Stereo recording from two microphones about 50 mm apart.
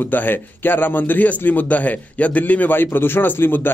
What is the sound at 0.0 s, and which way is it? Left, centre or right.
A man's voice, left.